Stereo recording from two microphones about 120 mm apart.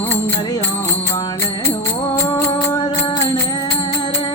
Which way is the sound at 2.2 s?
25° left (ahead or behind).